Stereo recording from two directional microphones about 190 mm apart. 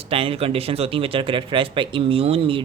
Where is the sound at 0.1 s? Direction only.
30° right (ahead or behind).